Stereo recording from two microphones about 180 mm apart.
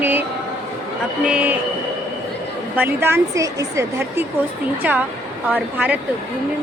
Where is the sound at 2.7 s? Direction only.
10° right (ahead or behind).